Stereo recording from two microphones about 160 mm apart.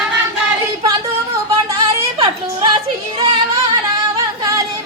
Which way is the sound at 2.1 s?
35° right (ahead or behind).